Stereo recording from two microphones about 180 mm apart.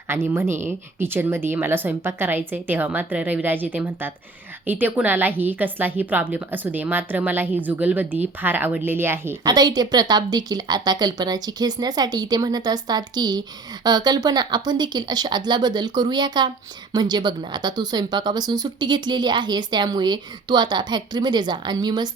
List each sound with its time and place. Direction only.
0.1 s a woman's voice: 15° right (ahead or behind)